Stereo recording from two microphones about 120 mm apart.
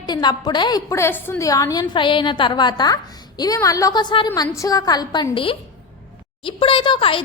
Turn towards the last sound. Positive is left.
turn(degrees=45)  # may be behind; listen again after turning